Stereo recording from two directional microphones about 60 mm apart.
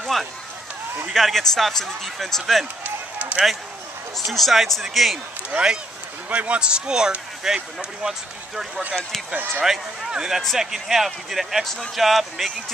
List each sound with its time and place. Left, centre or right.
0.0 s a sound: centre
1.1 s speech: centre
2.8 s run: right
4.3 s speech: centre
5.5 s a man's voice: centre
11.6 s speech: centre